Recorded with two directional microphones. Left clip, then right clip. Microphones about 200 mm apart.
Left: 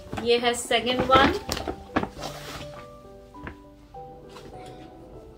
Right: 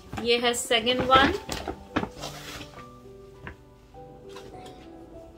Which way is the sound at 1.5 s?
25° left (ahead or behind).